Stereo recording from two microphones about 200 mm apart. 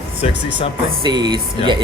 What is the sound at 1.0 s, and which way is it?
Speech, 20° right (ahead or behind).